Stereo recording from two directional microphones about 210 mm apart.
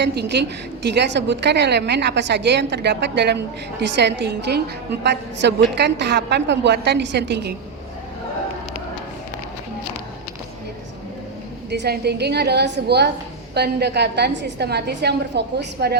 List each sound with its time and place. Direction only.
0.0 s a woman's voice: 50° right (ahead or behind)
11.7 s a woman's voice: 50° right (ahead or behind)